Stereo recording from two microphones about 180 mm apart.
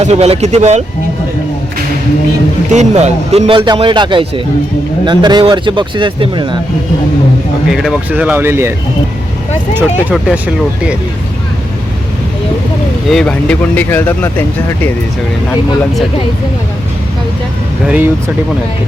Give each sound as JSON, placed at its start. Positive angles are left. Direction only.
{"t": 0.0, "sound": "speech", "side_deg": -35}
{"t": 2.7, "sound": "speech", "side_deg": -40}
{"t": 7.7, "sound": "speech", "side_deg": 0}
{"t": 9.7, "sound": "speech", "side_deg": -10}
{"t": 13.1, "sound": "speech", "side_deg": 5}
{"t": 17.8, "sound": "speech", "side_deg": -10}